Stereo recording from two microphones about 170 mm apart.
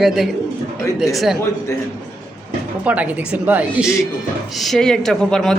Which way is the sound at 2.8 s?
10° right (ahead or behind).